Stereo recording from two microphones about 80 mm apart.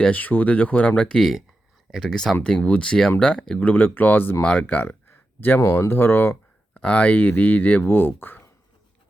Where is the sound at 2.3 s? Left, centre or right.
Centre.